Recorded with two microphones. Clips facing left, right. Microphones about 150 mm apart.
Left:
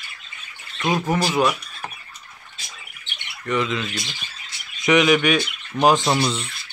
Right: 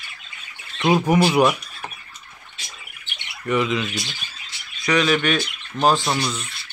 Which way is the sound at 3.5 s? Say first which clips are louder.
Right 2 dB; 5° right (ahead or behind).